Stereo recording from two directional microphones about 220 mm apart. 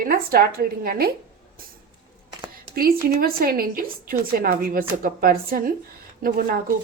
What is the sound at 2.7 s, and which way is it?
Speech, 40° right (ahead or behind).